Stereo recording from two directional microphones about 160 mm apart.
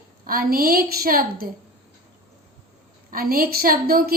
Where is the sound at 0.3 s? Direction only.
65° right (ahead or behind).